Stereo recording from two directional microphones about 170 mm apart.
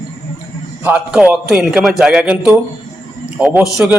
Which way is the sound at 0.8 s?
5° right (ahead or behind).